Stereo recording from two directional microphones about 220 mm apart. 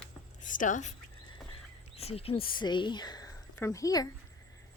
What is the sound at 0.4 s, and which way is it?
Speech, 35° left (ahead or behind).